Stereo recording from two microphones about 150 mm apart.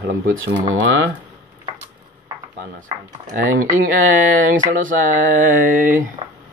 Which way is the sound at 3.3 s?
65° right (ahead or behind).